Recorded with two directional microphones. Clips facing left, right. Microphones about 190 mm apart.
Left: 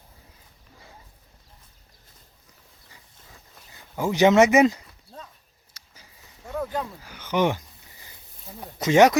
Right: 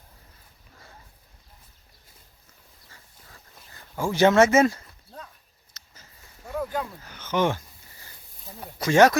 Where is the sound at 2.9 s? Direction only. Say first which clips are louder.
Even; 15° left (ahead or behind).